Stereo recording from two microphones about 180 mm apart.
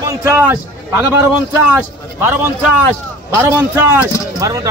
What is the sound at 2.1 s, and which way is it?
A man's voice, 15° right (ahead or behind).